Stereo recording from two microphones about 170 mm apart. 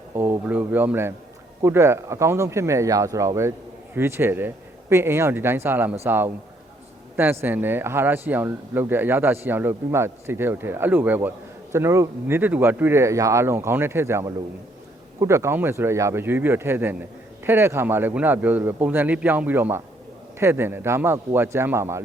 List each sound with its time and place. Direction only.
0.2 s speech: 10° right (ahead or behind)